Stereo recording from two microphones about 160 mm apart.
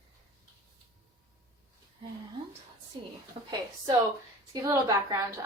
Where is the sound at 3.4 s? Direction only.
35° right (ahead or behind).